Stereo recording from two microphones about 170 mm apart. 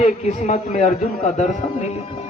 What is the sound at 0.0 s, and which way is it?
A man's voice, 40° left (ahead or behind).